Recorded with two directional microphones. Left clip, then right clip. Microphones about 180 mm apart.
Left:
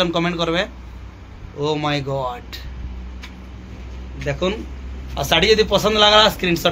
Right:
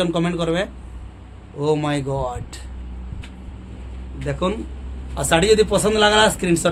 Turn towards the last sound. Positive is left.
turn(degrees=-40)  # may be behind; listen again after turning